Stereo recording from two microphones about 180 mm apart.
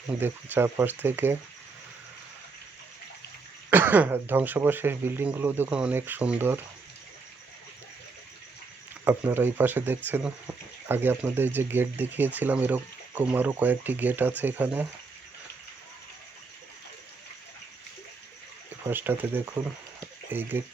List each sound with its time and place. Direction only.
0.2 s speech: 10° right (ahead or behind)
3.7 s speech: 10° right (ahead or behind)
9.0 s speech: 10° right (ahead or behind)
18.9 s speech: 10° right (ahead or behind)
20.0 s a sound: 10° right (ahead or behind)